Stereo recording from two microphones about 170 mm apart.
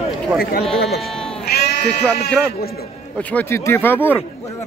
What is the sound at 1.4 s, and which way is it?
Sheep, 70° left (ahead or behind).